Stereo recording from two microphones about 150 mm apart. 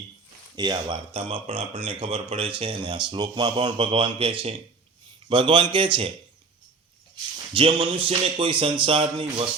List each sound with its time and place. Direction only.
0.5 s speech: 30° right (ahead or behind)
7.5 s speech: 35° right (ahead or behind)